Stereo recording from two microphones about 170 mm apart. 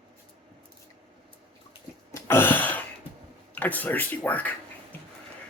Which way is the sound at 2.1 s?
15° left (ahead or behind).